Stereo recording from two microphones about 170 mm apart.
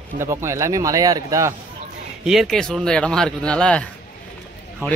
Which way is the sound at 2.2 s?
Centre (ahead or behind).